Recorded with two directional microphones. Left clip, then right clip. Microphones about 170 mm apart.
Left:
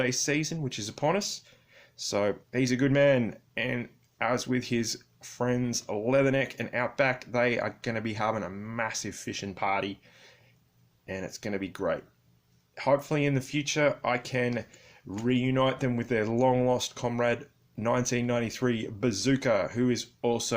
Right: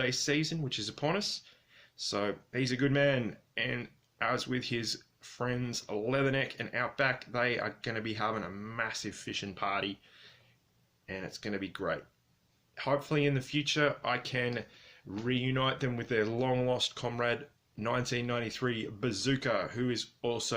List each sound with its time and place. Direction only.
0.0 s speech: 40° left (ahead or behind)